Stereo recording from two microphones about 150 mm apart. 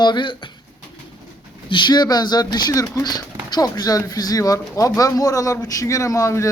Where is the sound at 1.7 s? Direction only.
30° left (ahead or behind).